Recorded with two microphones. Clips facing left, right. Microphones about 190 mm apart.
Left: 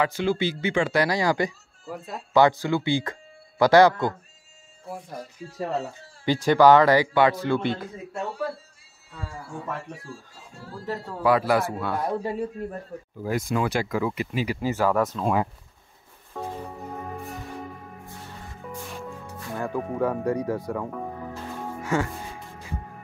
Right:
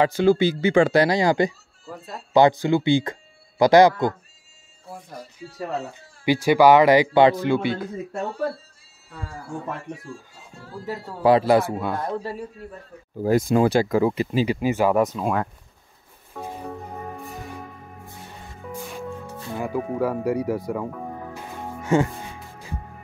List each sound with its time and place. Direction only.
0.0 s speech: 35° right (ahead or behind)
1.0 s speech: 25° right (ahead or behind)
5.4 s speech: 40° left (ahead or behind)
6.2 s speech: 10° right (ahead or behind)
11.2 s speech: 25° right (ahead or behind)
11.7 s speech: 15° right (ahead or behind)
12.0 s a man's voice: 15° left (ahead or behind)
13.2 s speech: 30° right (ahead or behind); by 15.3 s 15° right (ahead or behind)
18.7 s music: 5° right (ahead or behind)
19.5 s speech: 5° right (ahead or behind)
21.8 s speech: 20° right (ahead or behind)